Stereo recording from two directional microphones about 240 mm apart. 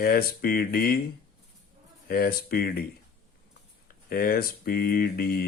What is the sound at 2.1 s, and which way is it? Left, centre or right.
Speech, left.